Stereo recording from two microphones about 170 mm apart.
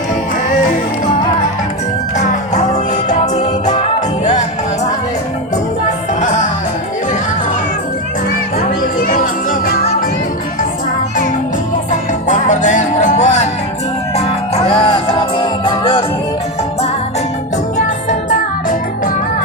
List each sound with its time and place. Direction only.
2.1 s music: 45° left (ahead or behind)
3.7 s music: 40° left (ahead or behind)
9.0 s music: 55° left (ahead or behind)
11.9 s music: 45° left (ahead or behind)